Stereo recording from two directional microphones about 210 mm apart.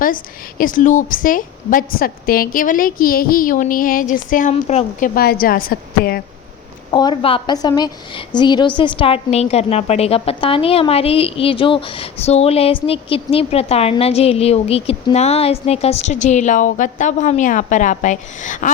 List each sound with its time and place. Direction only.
0.6 s a woman's voice: 40° left (ahead or behind)
6.9 s a woman's voice: 20° left (ahead or behind); by 18.7 s 35° left (ahead or behind)